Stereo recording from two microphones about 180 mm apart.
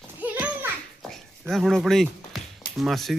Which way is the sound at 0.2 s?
10° right (ahead or behind).